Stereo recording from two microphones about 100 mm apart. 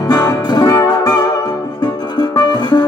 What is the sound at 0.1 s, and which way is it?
Music, 40° left (ahead or behind).